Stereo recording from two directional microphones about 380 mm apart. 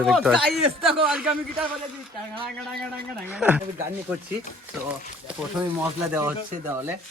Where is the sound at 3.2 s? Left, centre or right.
Centre.